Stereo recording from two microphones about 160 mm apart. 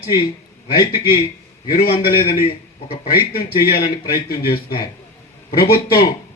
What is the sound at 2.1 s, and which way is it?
A man's voice, 70° left (ahead or behind).